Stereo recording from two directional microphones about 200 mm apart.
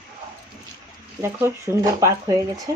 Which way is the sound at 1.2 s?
15° right (ahead or behind).